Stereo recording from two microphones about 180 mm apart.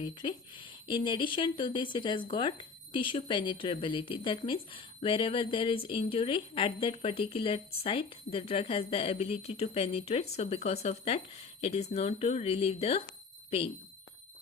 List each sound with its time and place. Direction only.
0.0 s speech: 25° left (ahead or behind)